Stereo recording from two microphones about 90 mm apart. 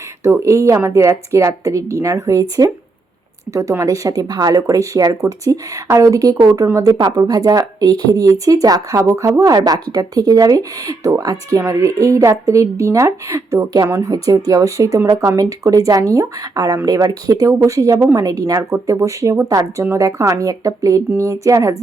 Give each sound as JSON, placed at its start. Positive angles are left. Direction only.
{"t": 0.2, "sound": "speech", "side_deg": -30}
{"t": 6.9, "sound": "speech", "side_deg": -50}